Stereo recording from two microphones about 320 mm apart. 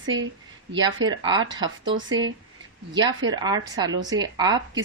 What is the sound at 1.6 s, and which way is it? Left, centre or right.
Speech, right.